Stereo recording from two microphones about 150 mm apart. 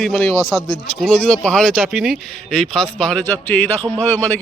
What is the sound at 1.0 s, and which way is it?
A man's voice, 5° left (ahead or behind).